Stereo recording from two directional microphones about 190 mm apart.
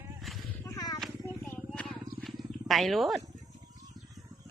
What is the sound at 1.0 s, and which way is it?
Vehicle, 5° left (ahead or behind).